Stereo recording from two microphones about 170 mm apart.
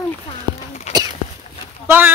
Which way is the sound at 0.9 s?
40° left (ahead or behind).